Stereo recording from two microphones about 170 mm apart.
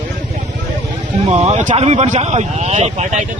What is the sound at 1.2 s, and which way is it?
Speech, 40° right (ahead or behind).